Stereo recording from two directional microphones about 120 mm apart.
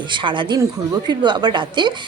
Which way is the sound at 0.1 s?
40° right (ahead or behind).